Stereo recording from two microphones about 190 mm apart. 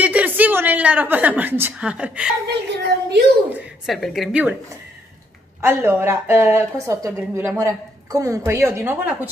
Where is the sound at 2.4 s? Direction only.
60° right (ahead or behind).